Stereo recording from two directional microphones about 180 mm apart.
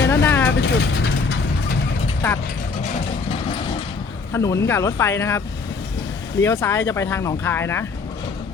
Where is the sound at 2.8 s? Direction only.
35° left (ahead or behind).